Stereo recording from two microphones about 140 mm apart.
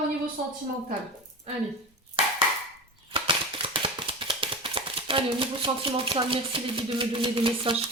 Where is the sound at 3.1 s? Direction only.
35° right (ahead or behind).